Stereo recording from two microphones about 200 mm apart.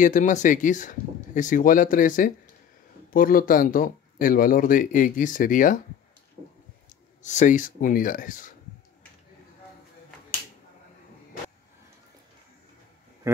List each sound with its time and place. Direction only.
0.0 s speech: 40° left (ahead or behind)
7.2 s speech: 40° left (ahead or behind)